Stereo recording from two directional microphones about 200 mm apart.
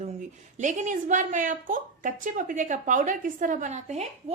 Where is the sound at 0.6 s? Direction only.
40° right (ahead or behind).